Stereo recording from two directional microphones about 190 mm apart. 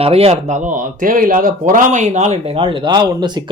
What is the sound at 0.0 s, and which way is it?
Speech, 30° right (ahead or behind).